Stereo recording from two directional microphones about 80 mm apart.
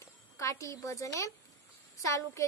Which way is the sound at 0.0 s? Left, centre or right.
Left.